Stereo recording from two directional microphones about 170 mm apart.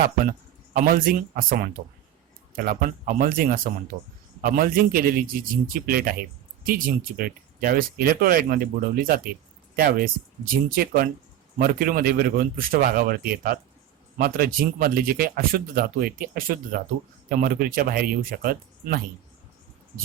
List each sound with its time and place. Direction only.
0.3 s speech: 55° right (ahead or behind)